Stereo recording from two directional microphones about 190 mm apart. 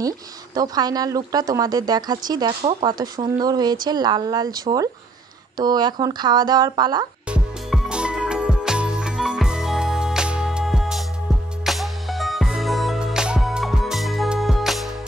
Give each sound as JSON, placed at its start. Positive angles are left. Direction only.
{"t": 0.6, "sound": "speech", "side_deg": -20}
{"t": 7.2, "sound": "music", "side_deg": -5}